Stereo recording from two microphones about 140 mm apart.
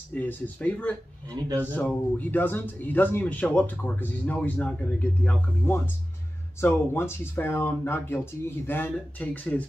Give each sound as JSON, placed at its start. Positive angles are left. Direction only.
{"t": 0.1, "sound": "speech", "side_deg": 10}
{"t": 1.4, "sound": "speech", "side_deg": -30}
{"t": 1.8, "sound": "speech", "side_deg": 10}